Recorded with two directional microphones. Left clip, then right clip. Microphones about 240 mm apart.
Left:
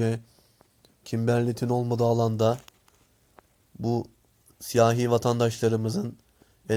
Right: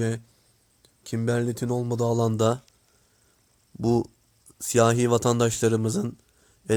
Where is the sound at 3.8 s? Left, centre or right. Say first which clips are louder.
Right 5 dB; right.